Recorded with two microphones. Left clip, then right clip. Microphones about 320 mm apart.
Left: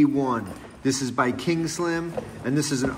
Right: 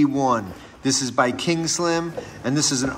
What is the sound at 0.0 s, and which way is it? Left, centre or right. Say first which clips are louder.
Speech: right 3 dB; centre.